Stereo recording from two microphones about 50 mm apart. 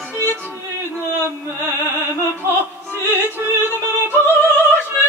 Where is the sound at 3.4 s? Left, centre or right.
Right.